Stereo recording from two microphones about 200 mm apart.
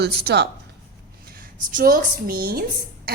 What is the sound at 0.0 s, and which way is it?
Speech, 55° right (ahead or behind).